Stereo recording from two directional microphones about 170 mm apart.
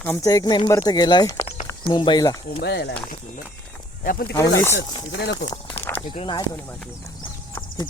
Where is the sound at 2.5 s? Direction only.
75° left (ahead or behind).